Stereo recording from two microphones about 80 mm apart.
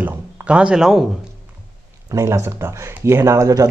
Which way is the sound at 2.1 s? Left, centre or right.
Right.